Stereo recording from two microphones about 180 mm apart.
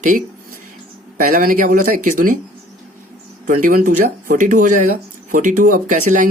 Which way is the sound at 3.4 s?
50° right (ahead or behind).